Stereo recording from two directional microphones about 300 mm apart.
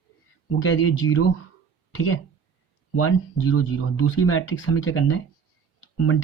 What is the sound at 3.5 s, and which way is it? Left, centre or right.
Speech, left.